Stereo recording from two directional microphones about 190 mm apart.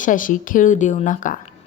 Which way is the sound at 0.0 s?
45° left (ahead or behind).